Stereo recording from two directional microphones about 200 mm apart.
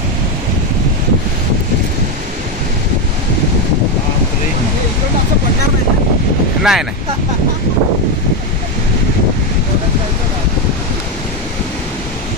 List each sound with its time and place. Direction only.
6.6 s speech: centre (ahead or behind)